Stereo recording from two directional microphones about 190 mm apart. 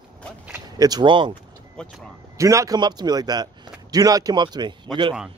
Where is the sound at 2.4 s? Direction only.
15° right (ahead or behind).